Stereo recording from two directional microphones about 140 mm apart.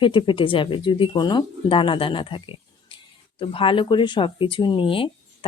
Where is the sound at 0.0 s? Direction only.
35° left (ahead or behind).